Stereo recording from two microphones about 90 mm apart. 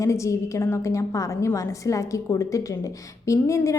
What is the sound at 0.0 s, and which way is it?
A woman's voice, 35° left (ahead or behind).